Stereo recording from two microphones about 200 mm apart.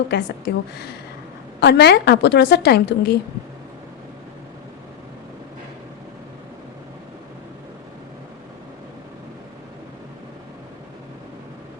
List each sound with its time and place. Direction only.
0.1 s a woman's voice: 55° left (ahead or behind)